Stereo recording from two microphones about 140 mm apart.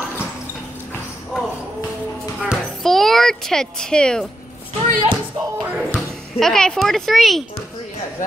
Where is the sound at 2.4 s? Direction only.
Centre (ahead or behind).